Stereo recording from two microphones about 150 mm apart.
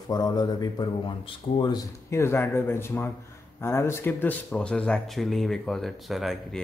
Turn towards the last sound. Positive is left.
turn(degrees=0)  # may be behind; listen again after turning